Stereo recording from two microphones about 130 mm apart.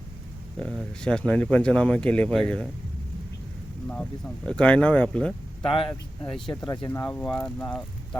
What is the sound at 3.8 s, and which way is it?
Speech, 10° left (ahead or behind).